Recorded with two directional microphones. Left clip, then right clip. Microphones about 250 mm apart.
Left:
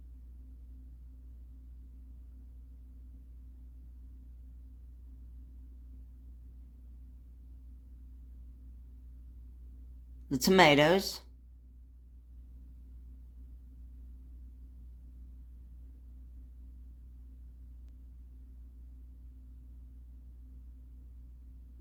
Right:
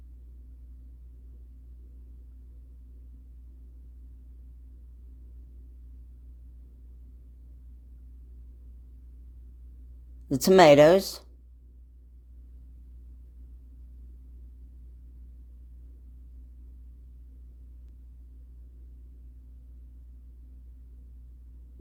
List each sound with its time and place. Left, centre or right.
10.2 s speech: right